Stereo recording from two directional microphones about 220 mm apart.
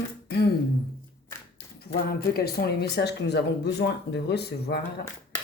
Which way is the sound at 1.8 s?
45° left (ahead or behind).